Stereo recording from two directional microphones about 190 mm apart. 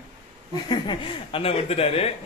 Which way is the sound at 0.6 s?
25° left (ahead or behind).